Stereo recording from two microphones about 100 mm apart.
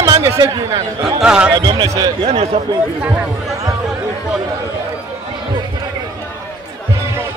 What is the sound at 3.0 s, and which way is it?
Speech, 15° right (ahead or behind).